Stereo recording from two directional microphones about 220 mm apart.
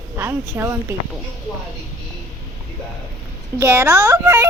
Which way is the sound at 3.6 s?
10° right (ahead or behind).